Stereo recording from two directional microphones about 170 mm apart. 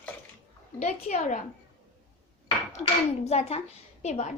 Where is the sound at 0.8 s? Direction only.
45° left (ahead or behind).